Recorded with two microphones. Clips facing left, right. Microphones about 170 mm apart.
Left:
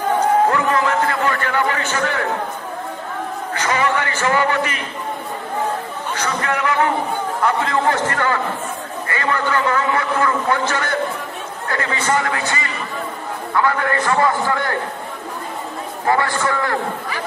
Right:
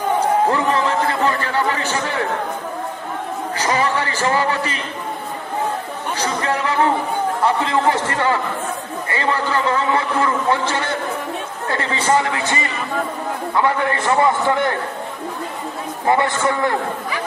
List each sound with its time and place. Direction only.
0.5 s a man's voice: 30° right (ahead or behind)
3.5 s a man's voice: 35° right (ahead or behind)
6.1 s a man's voice: 30° right (ahead or behind)
16.1 s a man's voice: 20° right (ahead or behind)